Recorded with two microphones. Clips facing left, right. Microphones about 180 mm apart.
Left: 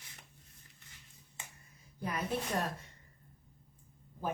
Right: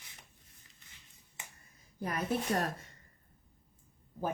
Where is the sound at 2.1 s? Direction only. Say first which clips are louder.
Right 3 dB; 45° right (ahead or behind).